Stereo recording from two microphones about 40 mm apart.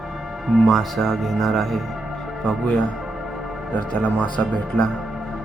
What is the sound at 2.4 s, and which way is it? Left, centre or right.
Speech, left.